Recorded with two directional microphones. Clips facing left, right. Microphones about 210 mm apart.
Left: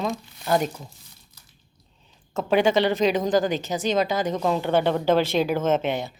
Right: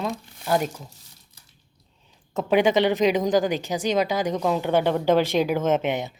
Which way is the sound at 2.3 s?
15° right (ahead or behind).